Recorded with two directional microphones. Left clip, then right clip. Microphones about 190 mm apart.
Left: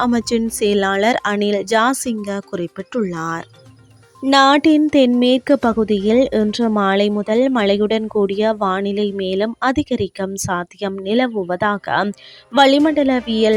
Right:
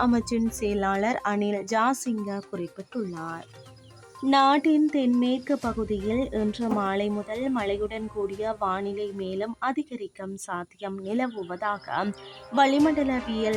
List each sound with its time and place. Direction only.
0.0 s speech: 35° left (ahead or behind)